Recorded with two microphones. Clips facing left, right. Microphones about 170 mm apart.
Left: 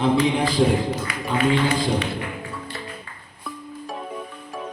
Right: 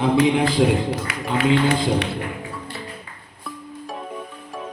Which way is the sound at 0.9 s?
75° right (ahead or behind).